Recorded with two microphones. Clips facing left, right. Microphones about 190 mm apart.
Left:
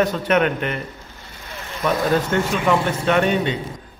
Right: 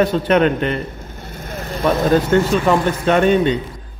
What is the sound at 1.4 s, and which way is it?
Vehicle, 45° right (ahead or behind).